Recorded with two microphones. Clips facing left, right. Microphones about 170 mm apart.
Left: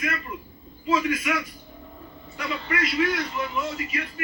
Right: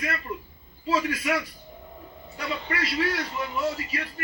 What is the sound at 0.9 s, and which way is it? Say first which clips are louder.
Speech: left 2 dB; 35° right (ahead or behind).